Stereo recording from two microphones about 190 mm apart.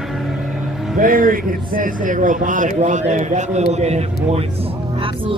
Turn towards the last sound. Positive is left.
turn(degrees=-35)  # may be behind; listen again after turning